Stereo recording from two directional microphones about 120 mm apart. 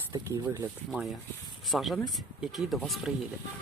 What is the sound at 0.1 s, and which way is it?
Speech, 30° right (ahead or behind).